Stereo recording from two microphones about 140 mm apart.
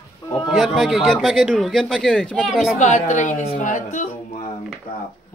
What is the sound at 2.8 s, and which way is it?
A woman's voice, 60° left (ahead or behind).